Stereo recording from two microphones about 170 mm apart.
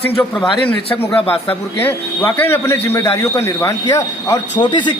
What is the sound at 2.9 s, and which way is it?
A man's voice, 20° left (ahead or behind).